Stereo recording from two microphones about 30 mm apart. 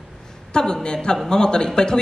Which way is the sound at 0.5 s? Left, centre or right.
Left.